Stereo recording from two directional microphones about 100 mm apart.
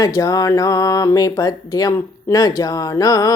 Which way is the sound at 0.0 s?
35° left (ahead or behind).